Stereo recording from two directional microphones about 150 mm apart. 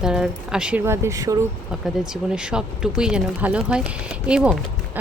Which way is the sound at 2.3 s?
5° right (ahead or behind).